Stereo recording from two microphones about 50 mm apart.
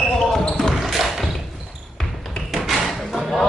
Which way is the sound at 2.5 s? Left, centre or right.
Centre.